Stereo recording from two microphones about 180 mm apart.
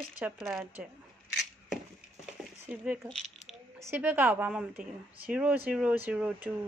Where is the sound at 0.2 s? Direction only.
Centre (ahead or behind).